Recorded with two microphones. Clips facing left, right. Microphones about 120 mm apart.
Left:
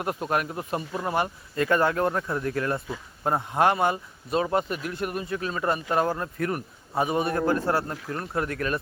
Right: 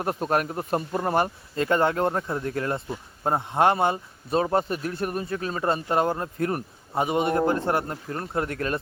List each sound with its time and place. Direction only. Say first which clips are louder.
0.0 s speech: right 2 dB; 35° right (ahead or behind)
1.5 s a man's voice: even; 25° right (ahead or behind)